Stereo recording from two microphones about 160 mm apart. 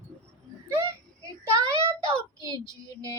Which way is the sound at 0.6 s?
15° right (ahead or behind).